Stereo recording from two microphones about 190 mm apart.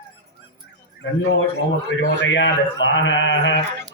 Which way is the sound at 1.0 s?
70° left (ahead or behind).